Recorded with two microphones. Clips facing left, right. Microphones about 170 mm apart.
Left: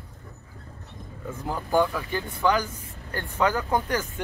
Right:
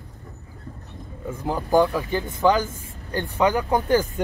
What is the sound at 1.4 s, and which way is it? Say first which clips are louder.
Speech: right 4 dB; 15° right (ahead or behind).